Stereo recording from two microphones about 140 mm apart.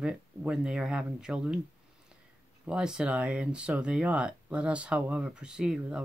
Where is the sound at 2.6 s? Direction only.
5° right (ahead or behind).